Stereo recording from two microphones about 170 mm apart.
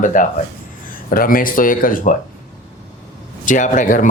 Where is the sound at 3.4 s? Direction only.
50° left (ahead or behind).